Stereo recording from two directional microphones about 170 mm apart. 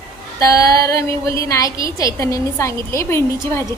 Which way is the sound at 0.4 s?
20° left (ahead or behind).